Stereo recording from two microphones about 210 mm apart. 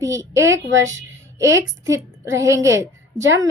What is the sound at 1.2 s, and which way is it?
A woman's voice, 15° right (ahead or behind).